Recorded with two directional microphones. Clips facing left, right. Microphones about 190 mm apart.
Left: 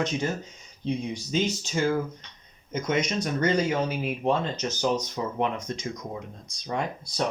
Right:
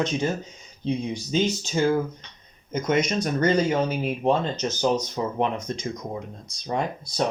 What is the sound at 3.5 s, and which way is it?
Speech, 30° right (ahead or behind).